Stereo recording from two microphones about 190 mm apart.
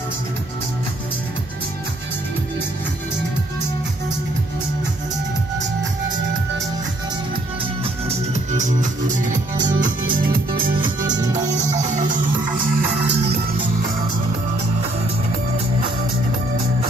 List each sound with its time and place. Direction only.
8.5 s music: 40° right (ahead or behind)
9.6 s music: 20° right (ahead or behind)
10.0 s music: 50° right (ahead or behind)
10.7 s music: 25° right (ahead or behind)
11.8 s music: 40° right (ahead or behind)